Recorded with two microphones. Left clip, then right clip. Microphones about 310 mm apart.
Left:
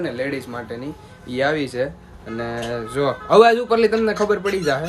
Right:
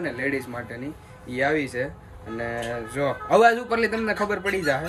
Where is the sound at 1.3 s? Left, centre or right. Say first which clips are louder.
Left 3 dB; centre.